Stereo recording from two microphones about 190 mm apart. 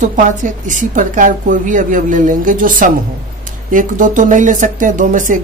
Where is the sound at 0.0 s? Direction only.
40° right (ahead or behind).